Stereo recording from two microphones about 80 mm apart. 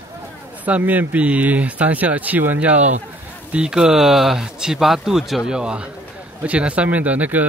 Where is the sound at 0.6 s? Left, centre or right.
Centre.